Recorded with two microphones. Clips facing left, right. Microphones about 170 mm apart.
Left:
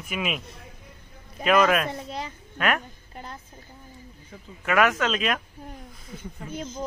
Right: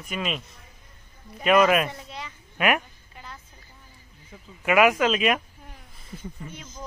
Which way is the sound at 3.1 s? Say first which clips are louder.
Left 4 dB; 45° left (ahead or behind).